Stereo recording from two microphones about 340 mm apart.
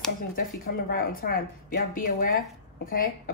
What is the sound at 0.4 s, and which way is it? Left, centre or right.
Speech, left.